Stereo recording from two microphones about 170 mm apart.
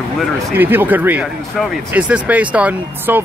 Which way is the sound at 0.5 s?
10° right (ahead or behind).